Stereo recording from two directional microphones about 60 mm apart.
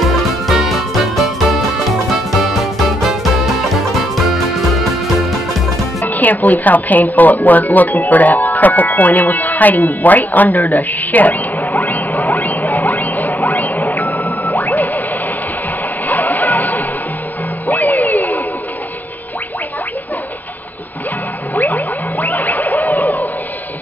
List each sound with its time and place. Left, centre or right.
0.0 s music: centre
6.0 s speech: left
12.1 s a sound: left
12.4 s a sound: left
14.0 s music: left
16.1 s music: left
21.5 s music: left